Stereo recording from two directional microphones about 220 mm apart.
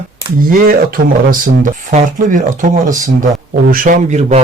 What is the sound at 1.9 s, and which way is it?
Speech, 35° right (ahead or behind).